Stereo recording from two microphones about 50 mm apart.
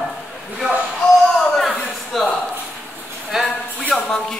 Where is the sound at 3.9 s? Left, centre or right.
Centre.